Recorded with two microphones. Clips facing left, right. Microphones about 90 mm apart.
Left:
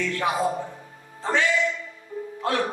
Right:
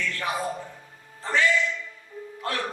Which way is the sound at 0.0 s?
20° left (ahead or behind).